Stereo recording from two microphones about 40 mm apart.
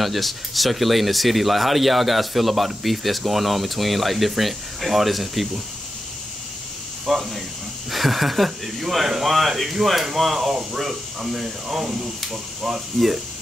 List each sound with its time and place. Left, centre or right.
0.0 s speech: centre
7.1 s speech: centre